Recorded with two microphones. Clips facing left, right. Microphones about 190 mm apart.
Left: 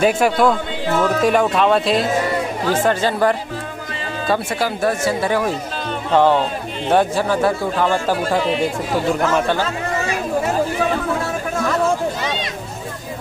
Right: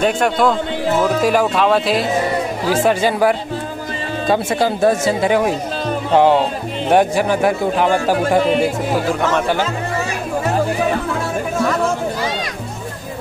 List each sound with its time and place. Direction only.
0.0 s a man's voice: 5° left (ahead or behind)
4.3 s a man's voice: 25° right (ahead or behind)
8.5 s speech: 5° right (ahead or behind)